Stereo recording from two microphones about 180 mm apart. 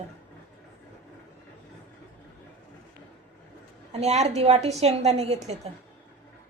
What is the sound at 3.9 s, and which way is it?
A woman's voice, 40° right (ahead or behind).